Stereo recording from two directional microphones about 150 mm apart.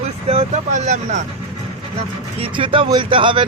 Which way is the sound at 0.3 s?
50° right (ahead or behind).